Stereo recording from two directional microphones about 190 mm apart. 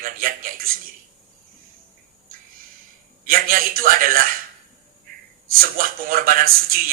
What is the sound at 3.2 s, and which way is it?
A man's voice, 50° right (ahead or behind).